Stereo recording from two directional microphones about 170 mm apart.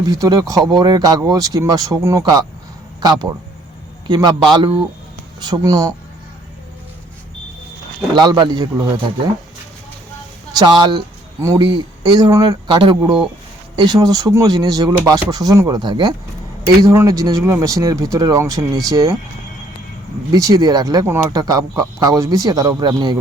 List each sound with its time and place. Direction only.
0.0 s speech: 20° right (ahead or behind)
8.1 s speech: 25° right (ahead or behind)
10.5 s speech: 25° right (ahead or behind)
20.3 s speech: 20° right (ahead or behind)